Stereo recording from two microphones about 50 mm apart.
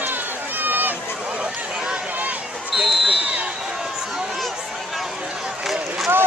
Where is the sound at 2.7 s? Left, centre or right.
Centre.